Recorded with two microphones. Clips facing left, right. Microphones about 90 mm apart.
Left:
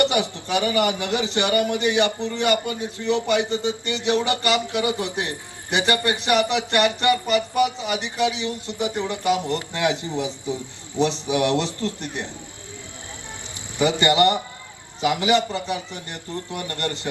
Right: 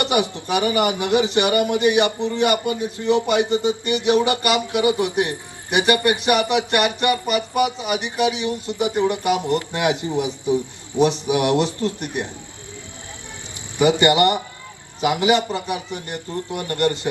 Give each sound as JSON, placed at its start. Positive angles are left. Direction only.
{"t": 0.0, "sound": "a man's voice", "side_deg": -20}
{"t": 13.7, "sound": "a man's voice", "side_deg": -20}